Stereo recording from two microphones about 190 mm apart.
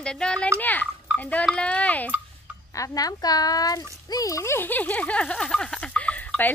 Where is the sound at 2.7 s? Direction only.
20° left (ahead or behind).